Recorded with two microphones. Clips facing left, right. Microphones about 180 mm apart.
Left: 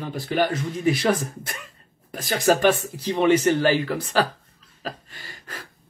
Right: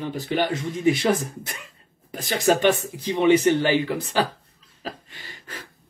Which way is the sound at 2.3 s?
45° left (ahead or behind).